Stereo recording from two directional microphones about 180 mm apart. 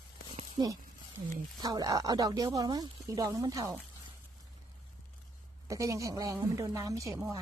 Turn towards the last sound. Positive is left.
turn(degrees=-15)  # may be behind; listen again after turning